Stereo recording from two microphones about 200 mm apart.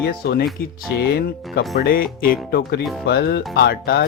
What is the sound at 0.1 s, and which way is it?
Speech, 50° left (ahead or behind).